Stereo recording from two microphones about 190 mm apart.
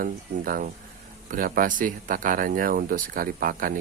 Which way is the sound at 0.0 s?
45° right (ahead or behind).